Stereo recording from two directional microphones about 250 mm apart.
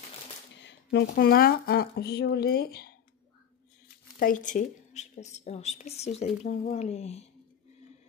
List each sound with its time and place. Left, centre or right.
0.6 s speech: left
4.2 s a woman's voice: left